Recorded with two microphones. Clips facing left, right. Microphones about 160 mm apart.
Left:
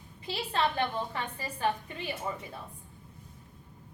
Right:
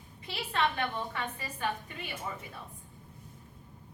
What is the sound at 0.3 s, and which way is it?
A woman's voice, 30° left (ahead or behind).